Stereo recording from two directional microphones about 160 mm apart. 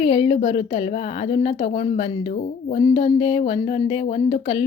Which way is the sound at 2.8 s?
30° left (ahead or behind).